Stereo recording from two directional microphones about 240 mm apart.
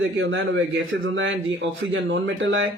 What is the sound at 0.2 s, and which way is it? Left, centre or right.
A man's voice, right.